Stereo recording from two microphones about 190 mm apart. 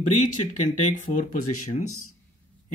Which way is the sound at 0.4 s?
40° left (ahead or behind).